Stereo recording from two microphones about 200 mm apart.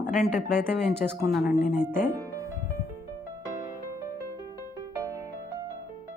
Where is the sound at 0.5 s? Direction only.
5° left (ahead or behind).